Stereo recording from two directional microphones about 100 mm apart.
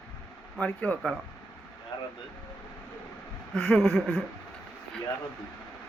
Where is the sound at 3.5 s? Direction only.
10° left (ahead or behind).